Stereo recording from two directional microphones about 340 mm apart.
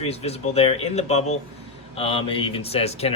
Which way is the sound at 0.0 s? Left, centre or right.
Centre.